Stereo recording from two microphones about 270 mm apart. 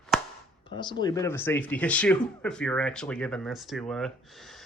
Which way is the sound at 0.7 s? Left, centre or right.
Centre.